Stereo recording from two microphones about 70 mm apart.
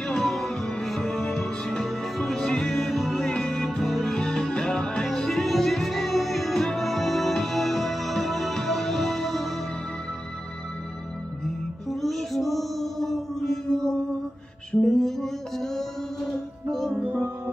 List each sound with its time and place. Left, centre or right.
0.0 s music: centre
11.4 s music: centre
16.9 s music: centre